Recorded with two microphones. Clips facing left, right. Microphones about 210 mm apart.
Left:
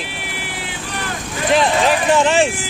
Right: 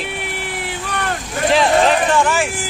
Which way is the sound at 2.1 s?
25° left (ahead or behind).